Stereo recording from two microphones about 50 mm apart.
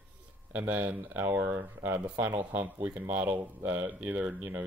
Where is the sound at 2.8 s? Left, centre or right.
Right.